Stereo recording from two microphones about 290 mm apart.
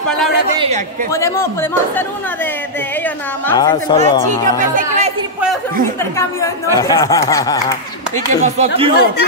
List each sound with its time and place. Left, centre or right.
1.1 s speech: centre
3.4 s speech: centre
4.6 s speech: right
6.1 s speech: centre
8.5 s speech: centre